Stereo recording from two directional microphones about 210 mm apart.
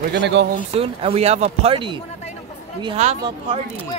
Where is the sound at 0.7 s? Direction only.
25° right (ahead or behind).